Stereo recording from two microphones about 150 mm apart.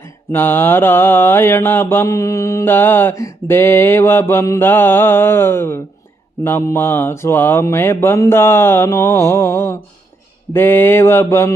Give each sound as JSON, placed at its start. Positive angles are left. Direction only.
{"t": 0.0, "sound": "mantra", "side_deg": 15}